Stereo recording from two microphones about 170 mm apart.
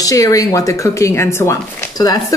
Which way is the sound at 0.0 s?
20° left (ahead or behind).